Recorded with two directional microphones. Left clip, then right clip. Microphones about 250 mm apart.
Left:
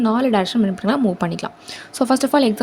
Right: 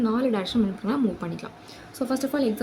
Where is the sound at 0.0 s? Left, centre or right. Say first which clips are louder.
Left 7 dB; left.